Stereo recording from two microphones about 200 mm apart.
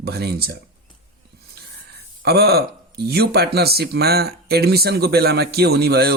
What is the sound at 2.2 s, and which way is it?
Speech, 55° right (ahead or behind).